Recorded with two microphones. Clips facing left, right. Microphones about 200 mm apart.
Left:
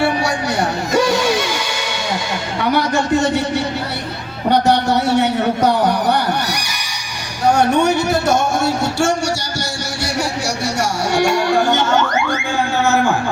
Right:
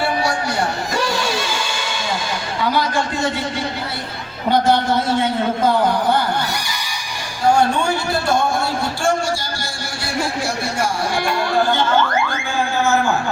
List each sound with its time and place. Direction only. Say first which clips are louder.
1.1 s music: left 5 dB; 70° left (ahead or behind)
2.7 s a man's voice: left 8 dB; 75° left (ahead or behind)
4.5 s a man's voice: left 1 dB; 70° left (ahead or behind)
7.5 s speech: left 4 dB; 20° left (ahead or behind)
8.6 s a man's voice: left 3 dB; 75° left (ahead or behind)
10.8 s a man's voice: left 5 dB; 75° left (ahead or behind)
11.5 s music: left 2 dB; 85° left